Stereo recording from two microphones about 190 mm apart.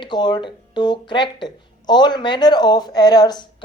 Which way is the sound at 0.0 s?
25° left (ahead or behind).